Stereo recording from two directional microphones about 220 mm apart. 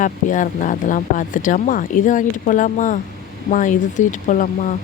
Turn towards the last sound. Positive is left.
turn(degrees=35)  # may be behind; listen again after turning